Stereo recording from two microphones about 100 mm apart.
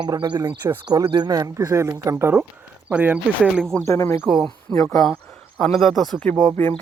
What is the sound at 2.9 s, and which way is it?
Speech, 15° right (ahead or behind).